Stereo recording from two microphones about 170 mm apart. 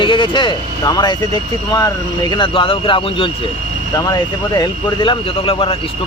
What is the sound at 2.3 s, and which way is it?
Speech, 30° left (ahead or behind).